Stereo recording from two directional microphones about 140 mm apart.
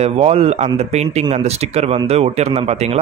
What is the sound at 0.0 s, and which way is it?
Speech, 45° right (ahead or behind).